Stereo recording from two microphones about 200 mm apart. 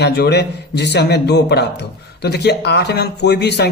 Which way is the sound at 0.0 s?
55° left (ahead or behind).